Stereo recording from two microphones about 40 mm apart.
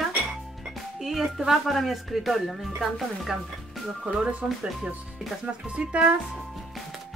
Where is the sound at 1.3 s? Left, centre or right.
Centre.